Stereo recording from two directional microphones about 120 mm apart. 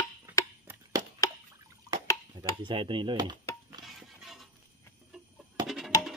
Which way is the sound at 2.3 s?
45° right (ahead or behind).